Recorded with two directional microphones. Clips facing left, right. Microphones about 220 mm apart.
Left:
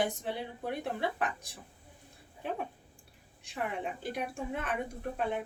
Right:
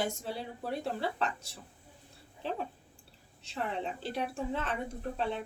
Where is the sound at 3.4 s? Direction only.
15° left (ahead or behind).